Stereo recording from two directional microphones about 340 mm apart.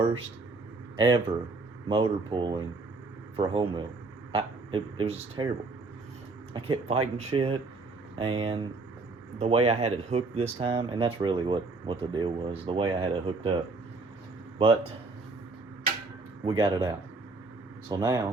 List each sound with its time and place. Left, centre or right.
0.9 s speech: centre
6.5 s speech: centre
14.6 s speech: centre
16.4 s speech: centre